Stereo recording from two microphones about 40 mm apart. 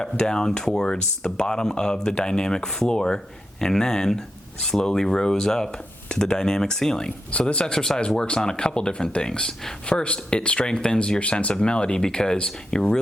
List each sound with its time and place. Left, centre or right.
0.0 s speech: centre
7.3 s speech: left